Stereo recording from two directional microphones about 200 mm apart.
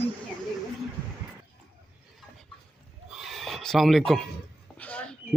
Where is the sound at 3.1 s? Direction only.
Centre (ahead or behind).